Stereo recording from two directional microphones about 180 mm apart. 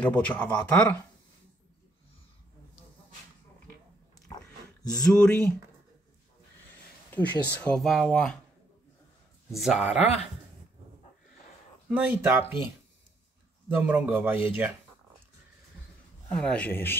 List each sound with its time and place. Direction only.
0.0 s speech: 10° left (ahead or behind)
5.0 s speech: 5° left (ahead or behind)
7.1 s speech: 10° left (ahead or behind)
9.6 s speech: 5° right (ahead or behind)
11.9 s a man's voice: 10° right (ahead or behind)
13.7 s a man's voice: 10° right (ahead or behind)
16.3 s speech: 5° left (ahead or behind)